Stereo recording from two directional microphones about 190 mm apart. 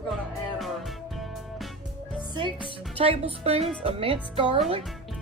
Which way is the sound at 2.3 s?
25° right (ahead or behind).